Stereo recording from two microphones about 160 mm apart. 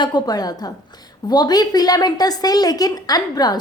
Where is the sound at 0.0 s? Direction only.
25° left (ahead or behind).